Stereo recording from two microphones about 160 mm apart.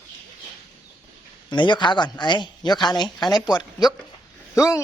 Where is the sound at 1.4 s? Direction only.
30° left (ahead or behind).